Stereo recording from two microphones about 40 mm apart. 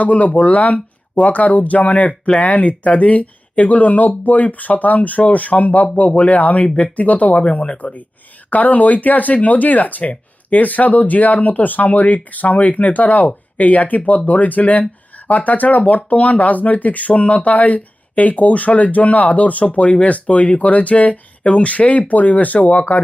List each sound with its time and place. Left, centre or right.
0.0 s speech: left